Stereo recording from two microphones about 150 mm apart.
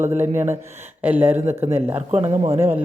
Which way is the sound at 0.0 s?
15° right (ahead or behind).